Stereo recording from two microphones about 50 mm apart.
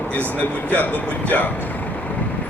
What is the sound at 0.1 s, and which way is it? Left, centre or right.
Speech, left.